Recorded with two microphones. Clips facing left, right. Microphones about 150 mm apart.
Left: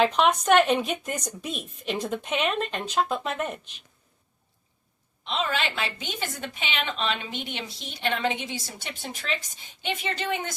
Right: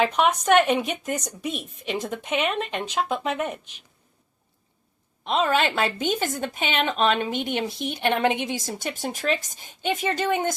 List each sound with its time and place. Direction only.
0.0 s speech: 10° right (ahead or behind)
5.2 s a woman's voice: 50° right (ahead or behind)